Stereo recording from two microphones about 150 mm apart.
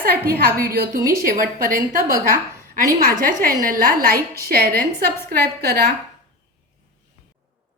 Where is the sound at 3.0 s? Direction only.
75° right (ahead or behind).